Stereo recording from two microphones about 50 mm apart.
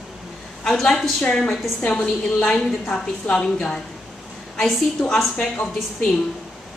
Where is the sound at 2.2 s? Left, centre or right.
Centre.